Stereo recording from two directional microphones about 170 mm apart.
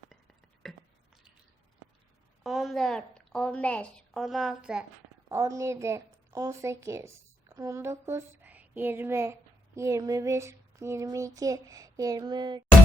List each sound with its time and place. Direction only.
0.6 s a sound: centre (ahead or behind)
2.4 s a woman's voice: centre (ahead or behind)
5.3 s speech: 20° right (ahead or behind)